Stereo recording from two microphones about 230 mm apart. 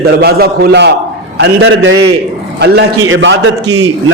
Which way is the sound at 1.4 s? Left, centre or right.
Right.